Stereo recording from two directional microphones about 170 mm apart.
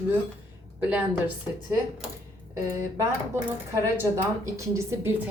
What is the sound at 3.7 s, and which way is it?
A woman's voice, 15° right (ahead or behind).